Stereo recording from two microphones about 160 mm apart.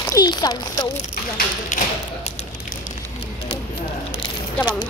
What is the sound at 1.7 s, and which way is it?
Tap, 50° left (ahead or behind).